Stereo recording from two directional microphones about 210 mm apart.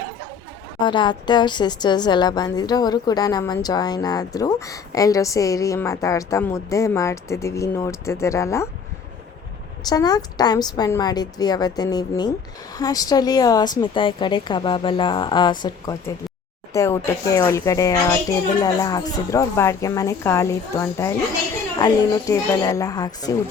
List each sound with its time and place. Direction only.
0.8 s a woman's voice: 20° left (ahead or behind)
9.8 s a woman's voice: 20° left (ahead or behind)